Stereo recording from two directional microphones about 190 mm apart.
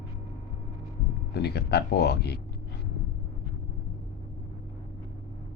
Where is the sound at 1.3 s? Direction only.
60° left (ahead or behind).